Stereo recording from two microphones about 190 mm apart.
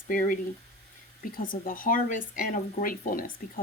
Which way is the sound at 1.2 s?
45° left (ahead or behind).